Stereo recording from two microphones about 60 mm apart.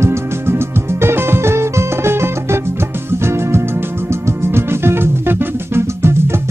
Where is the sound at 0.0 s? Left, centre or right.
Right.